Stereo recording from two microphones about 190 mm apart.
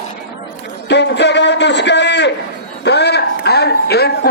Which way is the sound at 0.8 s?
65° left (ahead or behind).